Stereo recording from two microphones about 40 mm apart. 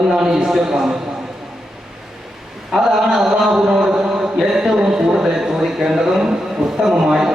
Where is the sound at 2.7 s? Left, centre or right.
Centre.